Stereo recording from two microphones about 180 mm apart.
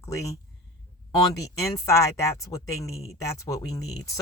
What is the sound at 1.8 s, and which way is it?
Speech, 15° left (ahead or behind).